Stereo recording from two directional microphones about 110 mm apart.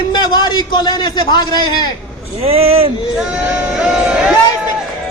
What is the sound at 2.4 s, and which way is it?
Speech, 60° right (ahead or behind).